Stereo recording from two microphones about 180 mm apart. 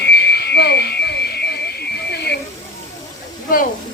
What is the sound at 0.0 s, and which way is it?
Music, 65° left (ahead or behind).